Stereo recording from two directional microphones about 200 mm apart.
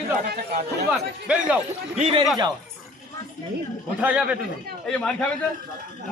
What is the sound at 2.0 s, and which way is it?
Speech, 30° right (ahead or behind).